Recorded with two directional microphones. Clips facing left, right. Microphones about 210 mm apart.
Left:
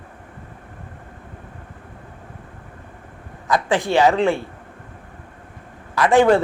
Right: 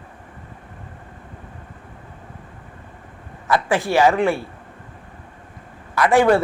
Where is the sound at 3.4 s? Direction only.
20° left (ahead or behind).